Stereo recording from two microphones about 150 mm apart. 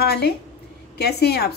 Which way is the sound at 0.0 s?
90° left.